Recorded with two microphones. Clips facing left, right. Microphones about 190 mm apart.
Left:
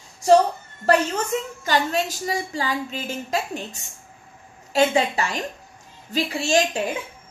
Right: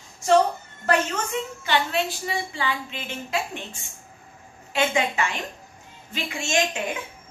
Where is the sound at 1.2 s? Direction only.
40° left (ahead or behind).